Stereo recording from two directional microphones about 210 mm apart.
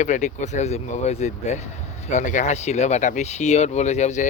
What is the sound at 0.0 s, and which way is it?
Speech, 35° left (ahead or behind).